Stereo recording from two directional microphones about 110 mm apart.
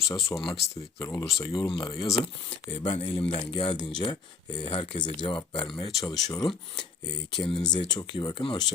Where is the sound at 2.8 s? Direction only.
55° left (ahead or behind).